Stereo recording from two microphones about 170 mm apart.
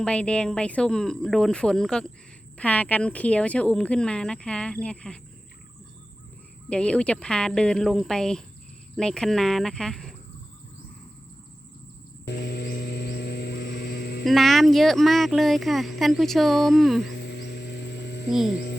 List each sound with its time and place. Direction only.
0.0 s speech: 5° left (ahead or behind)
6.7 s speech: 5° left (ahead or behind)
12.2 s vehicle: 80° left
14.3 s speech: centre (ahead or behind)
17.1 s a sound: 80° left
18.3 s speech: centre (ahead or behind)
18.5 s speech: 70° left (ahead or behind)